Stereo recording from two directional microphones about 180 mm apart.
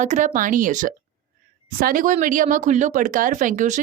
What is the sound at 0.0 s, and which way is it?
Speech, 45° right (ahead or behind).